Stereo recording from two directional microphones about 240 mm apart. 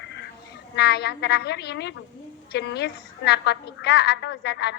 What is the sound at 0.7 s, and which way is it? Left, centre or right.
A woman's voice, left.